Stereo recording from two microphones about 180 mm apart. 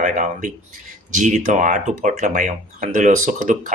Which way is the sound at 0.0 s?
45° right (ahead or behind).